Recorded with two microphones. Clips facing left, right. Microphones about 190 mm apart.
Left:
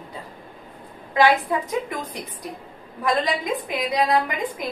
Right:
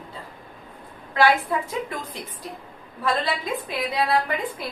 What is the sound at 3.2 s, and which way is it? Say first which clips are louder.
A woman's voice: left 2 dB; 15° left (ahead or behind).